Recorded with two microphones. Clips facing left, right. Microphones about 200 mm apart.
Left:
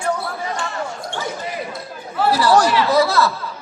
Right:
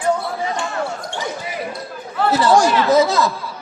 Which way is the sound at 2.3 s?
15° right (ahead or behind).